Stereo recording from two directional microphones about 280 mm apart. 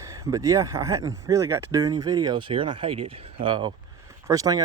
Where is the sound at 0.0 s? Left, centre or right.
Centre.